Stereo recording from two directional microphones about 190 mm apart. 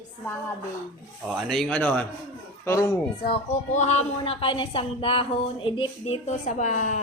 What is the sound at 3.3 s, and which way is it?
A woman's voice, 35° left (ahead or behind).